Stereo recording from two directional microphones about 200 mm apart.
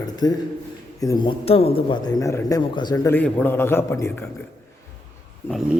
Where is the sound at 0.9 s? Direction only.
20° left (ahead or behind).